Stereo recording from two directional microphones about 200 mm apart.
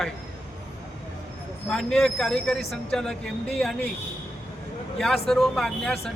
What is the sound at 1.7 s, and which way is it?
Speech, 5° left (ahead or behind).